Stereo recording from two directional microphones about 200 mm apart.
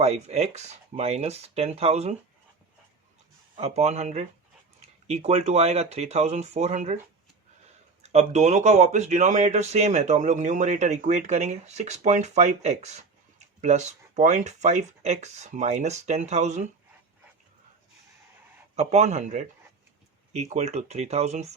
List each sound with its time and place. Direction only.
0.0 s speech: 35° right (ahead or behind)
3.5 s speech: 30° right (ahead or behind)
8.0 s speech: 35° right (ahead or behind)
18.8 s speech: 35° right (ahead or behind)